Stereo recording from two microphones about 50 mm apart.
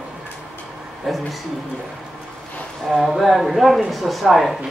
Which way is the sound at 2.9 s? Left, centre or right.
Centre.